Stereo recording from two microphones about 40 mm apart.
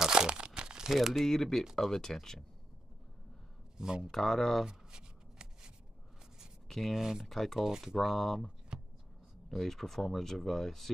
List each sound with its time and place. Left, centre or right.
0.0 s crumpling: centre
0.9 s speech: centre
1.2 s speech: centre
3.7 s speech: centre
4.1 s speech: centre
4.6 s shuffling cards: centre
6.7 s speech: centre
7.0 s speech: centre
7.2 s speech: centre
7.5 s speech: centre
7.8 s speech: centre
9.5 s speech: centre